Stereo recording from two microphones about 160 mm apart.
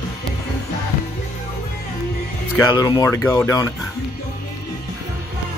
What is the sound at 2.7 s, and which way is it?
Speech, 25° left (ahead or behind).